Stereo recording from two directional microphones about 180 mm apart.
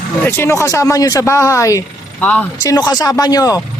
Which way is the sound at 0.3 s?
15° left (ahead or behind).